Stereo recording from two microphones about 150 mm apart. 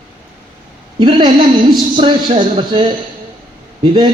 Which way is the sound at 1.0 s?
30° right (ahead or behind).